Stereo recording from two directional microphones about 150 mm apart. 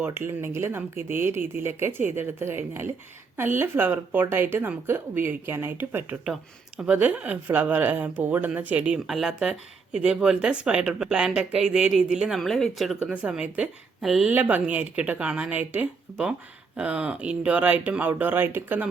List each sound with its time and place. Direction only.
0.0 s speech: 15° right (ahead or behind)